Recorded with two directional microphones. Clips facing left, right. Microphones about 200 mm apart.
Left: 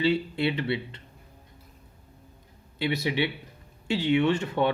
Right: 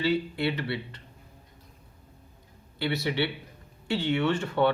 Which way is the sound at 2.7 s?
20° left (ahead or behind).